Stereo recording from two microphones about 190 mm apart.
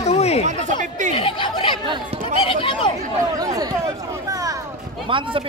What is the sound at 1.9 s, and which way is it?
Speech, 30° right (ahead or behind).